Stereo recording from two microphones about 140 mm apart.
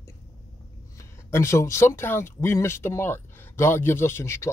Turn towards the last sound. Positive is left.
turn(degrees=20)  # may be behind; listen again after turning